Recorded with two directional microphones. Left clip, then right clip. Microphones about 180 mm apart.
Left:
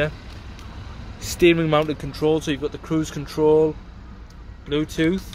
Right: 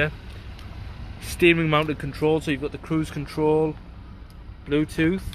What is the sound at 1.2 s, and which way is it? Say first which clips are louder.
Speech: left 2 dB; 5° right (ahead or behind).